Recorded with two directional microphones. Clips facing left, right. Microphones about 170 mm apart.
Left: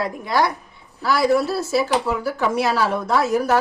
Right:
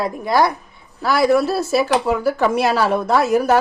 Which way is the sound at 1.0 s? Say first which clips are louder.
Right 3 dB; 60° right (ahead or behind).